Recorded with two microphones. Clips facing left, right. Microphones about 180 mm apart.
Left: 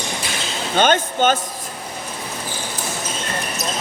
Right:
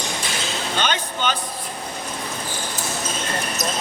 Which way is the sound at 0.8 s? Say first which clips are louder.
Left 10 dB; 50° left (ahead or behind).